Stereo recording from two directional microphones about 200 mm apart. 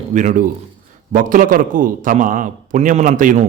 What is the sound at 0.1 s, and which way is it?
A man's voice, 40° right (ahead or behind).